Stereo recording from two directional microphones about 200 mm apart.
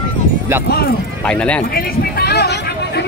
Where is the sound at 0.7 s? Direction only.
50° left (ahead or behind).